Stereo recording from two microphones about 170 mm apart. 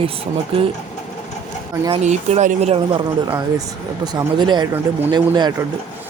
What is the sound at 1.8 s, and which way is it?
Speech, 40° right (ahead or behind).